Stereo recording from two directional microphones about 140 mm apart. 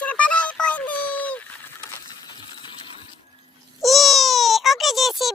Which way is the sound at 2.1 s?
30° left (ahead or behind).